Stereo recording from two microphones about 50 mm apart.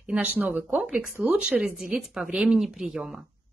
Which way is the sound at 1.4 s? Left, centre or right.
Centre.